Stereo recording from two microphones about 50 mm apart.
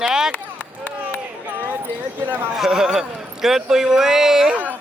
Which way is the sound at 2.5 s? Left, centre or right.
Centre.